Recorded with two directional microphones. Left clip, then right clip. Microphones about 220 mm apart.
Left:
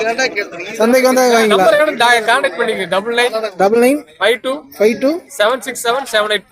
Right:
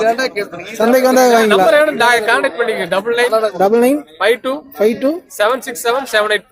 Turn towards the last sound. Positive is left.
turn(degrees=0)  # may be behind; listen again after turning